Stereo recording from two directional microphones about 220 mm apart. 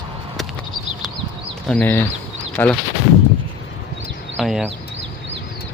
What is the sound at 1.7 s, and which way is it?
Speech, 10° left (ahead or behind).